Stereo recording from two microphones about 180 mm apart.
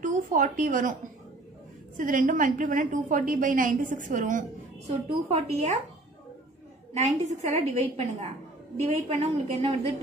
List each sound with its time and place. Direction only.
0.0 s a woman's voice: 45° right (ahead or behind)
2.0 s a woman's voice: 45° right (ahead or behind)
7.2 s a woman's voice: 40° right (ahead or behind)